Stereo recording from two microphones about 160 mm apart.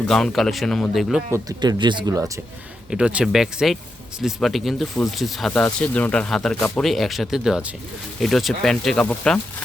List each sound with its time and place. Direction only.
0.1 s speech: centre (ahead or behind)
1.3 s speech: 25° right (ahead or behind)
2.9 s speech: 5° right (ahead or behind)